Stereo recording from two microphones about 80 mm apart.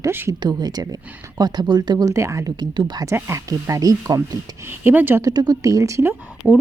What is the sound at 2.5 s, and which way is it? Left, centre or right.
Speech, right.